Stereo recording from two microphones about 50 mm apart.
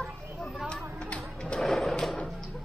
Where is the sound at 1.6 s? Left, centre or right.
Centre.